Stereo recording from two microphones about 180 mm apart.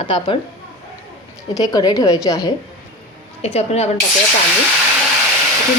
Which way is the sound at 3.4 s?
35° left (ahead or behind).